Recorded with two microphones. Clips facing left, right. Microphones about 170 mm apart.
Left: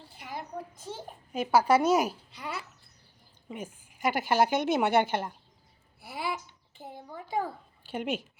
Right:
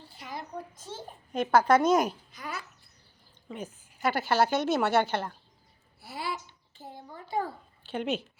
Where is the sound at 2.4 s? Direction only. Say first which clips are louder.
Left 1 dB; 25° left (ahead or behind).